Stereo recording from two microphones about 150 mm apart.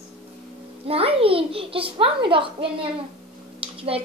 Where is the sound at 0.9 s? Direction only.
40° right (ahead or behind).